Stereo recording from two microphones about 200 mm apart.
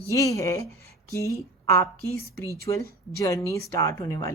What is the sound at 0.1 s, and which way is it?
Speech, 15° left (ahead or behind).